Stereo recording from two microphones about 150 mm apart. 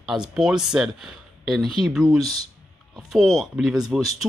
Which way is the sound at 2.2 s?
40° left (ahead or behind).